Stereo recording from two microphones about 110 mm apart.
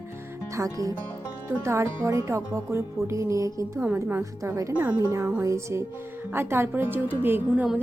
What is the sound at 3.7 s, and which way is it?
A woman's voice, 15° right (ahead or behind).